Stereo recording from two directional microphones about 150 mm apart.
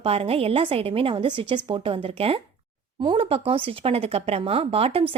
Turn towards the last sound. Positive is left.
turn(degrees=-40)  # may be behind; listen again after turning